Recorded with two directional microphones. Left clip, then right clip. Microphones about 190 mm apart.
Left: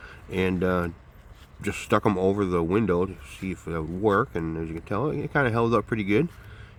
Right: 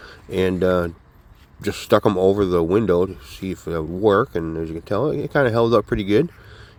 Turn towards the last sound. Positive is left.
turn(degrees=-20)  # may be behind; listen again after turning